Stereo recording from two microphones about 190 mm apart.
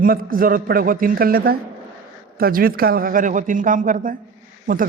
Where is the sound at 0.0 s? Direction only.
50° right (ahead or behind).